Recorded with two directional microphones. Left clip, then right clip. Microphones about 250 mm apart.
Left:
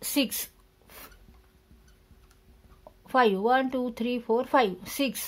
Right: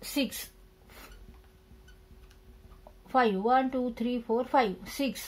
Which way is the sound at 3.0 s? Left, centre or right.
Left.